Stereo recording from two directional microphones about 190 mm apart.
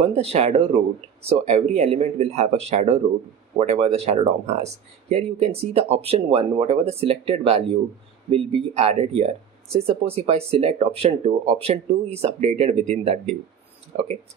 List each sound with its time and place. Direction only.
0.0 s speech: 35° right (ahead or behind)